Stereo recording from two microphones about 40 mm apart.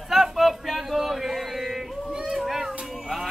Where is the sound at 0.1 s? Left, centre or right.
Centre.